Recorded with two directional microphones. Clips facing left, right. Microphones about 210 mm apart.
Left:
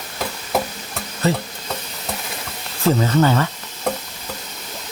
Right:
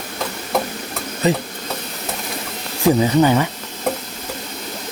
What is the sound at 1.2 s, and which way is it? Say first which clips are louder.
Speech: right 2 dB; 15° right (ahead or behind).